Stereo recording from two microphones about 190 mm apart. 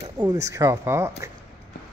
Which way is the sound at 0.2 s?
15° right (ahead or behind).